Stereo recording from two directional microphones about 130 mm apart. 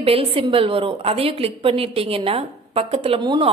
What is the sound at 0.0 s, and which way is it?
A woman's voice, 45° right (ahead or behind).